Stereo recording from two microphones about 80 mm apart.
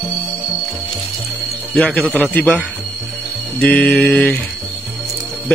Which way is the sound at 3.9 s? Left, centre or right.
Centre.